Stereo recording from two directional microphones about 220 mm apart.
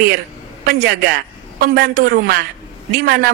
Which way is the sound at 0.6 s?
45° right (ahead or behind).